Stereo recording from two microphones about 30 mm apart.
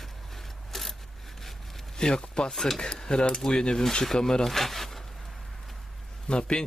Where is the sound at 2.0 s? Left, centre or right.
Left.